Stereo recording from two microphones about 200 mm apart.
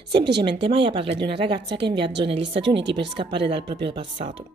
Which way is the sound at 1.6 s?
55° right (ahead or behind).